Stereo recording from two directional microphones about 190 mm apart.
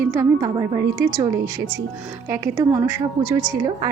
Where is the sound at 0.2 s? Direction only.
20° right (ahead or behind).